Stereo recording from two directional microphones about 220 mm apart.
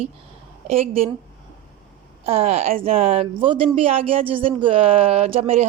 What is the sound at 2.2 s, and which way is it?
Speech, 25° right (ahead or behind).